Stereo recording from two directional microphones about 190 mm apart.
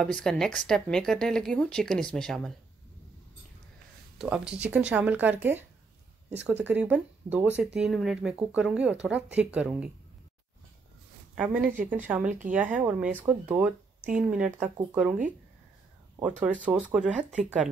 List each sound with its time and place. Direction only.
0.0 s speech: 5° left (ahead or behind)
4.2 s speech: 5° right (ahead or behind)
11.3 s speech: 10° right (ahead or behind)
11.6 s a woman's voice: 45° right (ahead or behind)
12.1 s speech: 5° right (ahead or behind)
16.2 s speech: 10° right (ahead or behind)